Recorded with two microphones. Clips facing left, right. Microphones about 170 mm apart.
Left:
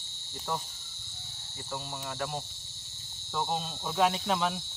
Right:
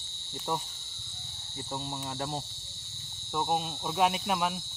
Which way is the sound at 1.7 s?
25° right (ahead or behind).